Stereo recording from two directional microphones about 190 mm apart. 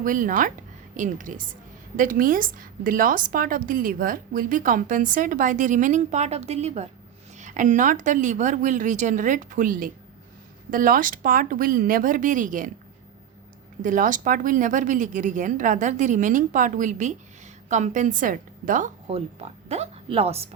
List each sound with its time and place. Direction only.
0.0 s a woman's voice: 45° right (ahead or behind)
13.8 s speech: 45° right (ahead or behind)
19.0 s speech: 30° right (ahead or behind)